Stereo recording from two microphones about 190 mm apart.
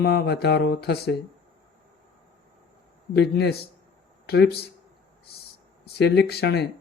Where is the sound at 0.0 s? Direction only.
60° left (ahead or behind).